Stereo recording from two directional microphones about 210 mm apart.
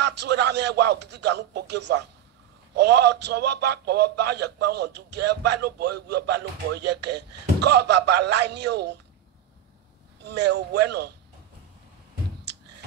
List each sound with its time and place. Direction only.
0.0 s a man's voice: 55° right (ahead or behind)
10.2 s a man's voice: 55° right (ahead or behind)